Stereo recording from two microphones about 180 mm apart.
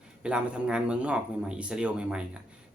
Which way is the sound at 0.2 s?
5° right (ahead or behind).